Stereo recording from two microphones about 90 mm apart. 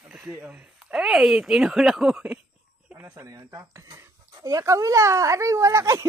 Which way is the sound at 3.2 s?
40° right (ahead or behind).